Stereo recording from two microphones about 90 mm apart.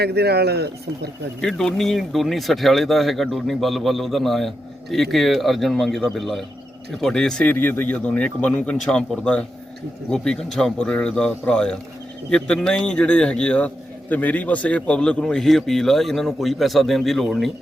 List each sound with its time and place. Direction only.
1.4 s a man's voice: 5° left (ahead or behind)
7.5 s a man's voice: 25° left (ahead or behind); by 17.5 s centre (ahead or behind)